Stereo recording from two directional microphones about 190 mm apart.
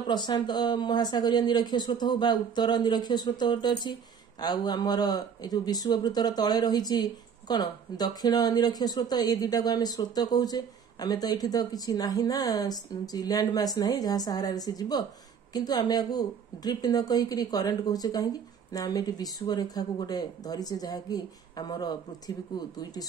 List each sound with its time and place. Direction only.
0.0 s speech: 20° left (ahead or behind)